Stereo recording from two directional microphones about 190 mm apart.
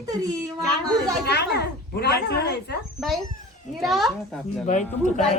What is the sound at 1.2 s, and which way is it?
Speech, 60° left (ahead or behind).